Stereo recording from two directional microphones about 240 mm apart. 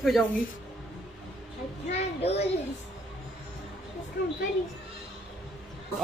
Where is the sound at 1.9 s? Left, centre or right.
Left.